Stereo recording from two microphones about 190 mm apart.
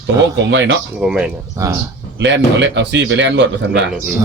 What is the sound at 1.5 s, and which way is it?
Speech, 15° right (ahead or behind).